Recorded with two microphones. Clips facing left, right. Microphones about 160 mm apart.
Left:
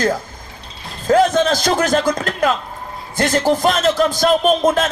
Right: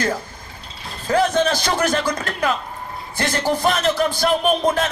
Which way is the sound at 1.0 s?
45° left (ahead or behind).